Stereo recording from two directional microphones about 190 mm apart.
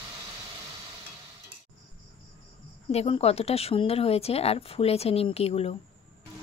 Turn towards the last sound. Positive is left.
turn(degrees=30)  # may be behind; listen again after turning